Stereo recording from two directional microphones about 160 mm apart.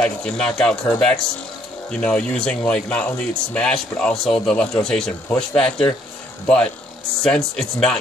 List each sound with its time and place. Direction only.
0.0 s speech: 5° left (ahead or behind)